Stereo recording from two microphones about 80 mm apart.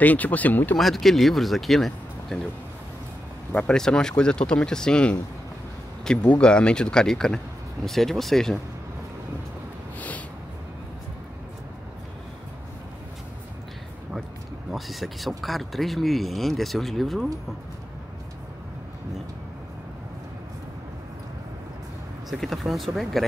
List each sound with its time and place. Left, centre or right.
0.0 s speech: left
0.7 s speech: centre
3.5 s speech: centre
9.9 s snort: centre
14.7 s speech: centre
22.3 s speech: centre